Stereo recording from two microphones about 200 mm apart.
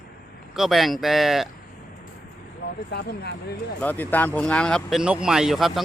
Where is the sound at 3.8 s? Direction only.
10° left (ahead or behind).